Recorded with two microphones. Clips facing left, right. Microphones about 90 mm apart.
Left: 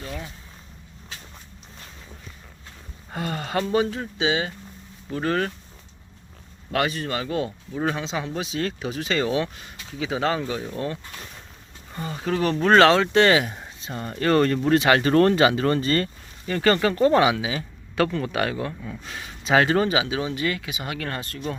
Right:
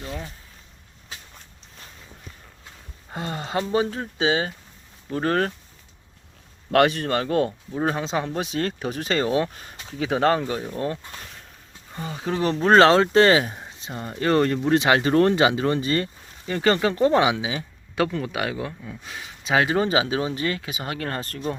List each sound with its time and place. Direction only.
3.1 s speech: 20° right (ahead or behind); by 5.5 s 45° right (ahead or behind)
6.7 s speech: 60° right (ahead or behind)
7.7 s speech: 30° right (ahead or behind); by 10.4 s 45° right (ahead or behind)
11.9 s speech: 10° right (ahead or behind)
12.6 s speech: 30° right (ahead or behind); by 19.8 s 5° right (ahead or behind)
19.8 s speech: 35° right (ahead or behind)